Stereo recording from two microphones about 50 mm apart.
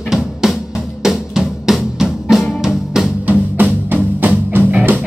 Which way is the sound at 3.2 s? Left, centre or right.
Right.